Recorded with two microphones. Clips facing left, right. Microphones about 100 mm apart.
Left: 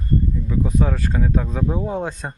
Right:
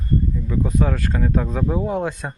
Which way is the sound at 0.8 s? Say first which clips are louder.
Even; 15° left (ahead or behind).